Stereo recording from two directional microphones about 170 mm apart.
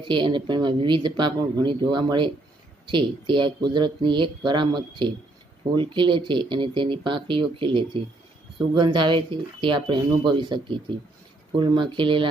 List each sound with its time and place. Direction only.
0.0 s speech: 30° right (ahead or behind)